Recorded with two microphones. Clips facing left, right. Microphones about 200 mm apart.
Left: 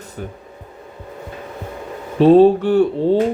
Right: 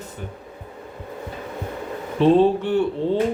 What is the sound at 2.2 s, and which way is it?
Speech, 40° left (ahead or behind).